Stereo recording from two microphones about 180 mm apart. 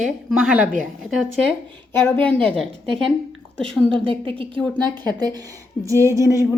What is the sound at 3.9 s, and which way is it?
Speech, 30° right (ahead or behind).